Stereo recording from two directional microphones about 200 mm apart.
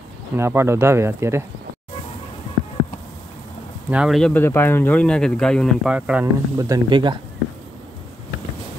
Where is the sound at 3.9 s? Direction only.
Centre (ahead or behind).